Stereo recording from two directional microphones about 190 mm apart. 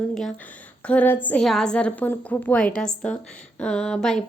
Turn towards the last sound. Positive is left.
turn(degrees=0)  # may be behind; listen again after turning